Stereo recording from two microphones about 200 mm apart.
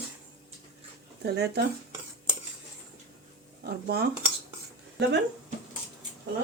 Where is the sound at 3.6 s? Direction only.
55° right (ahead or behind).